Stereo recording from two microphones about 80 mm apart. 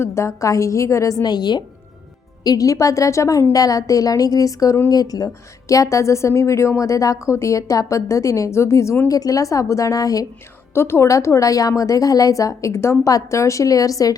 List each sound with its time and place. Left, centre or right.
0.0 s speech: left
1.2 s a woman's voice: left
2.4 s a woman's voice: left
9.0 s a woman's voice: left
10.8 s a woman's voice: left